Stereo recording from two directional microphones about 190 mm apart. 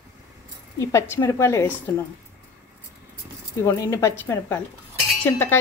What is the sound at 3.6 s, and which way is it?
A woman's voice, 15° left (ahead or behind).